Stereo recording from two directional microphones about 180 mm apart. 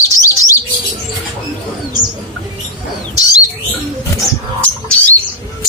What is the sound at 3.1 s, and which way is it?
Bird, 20° left (ahead or behind).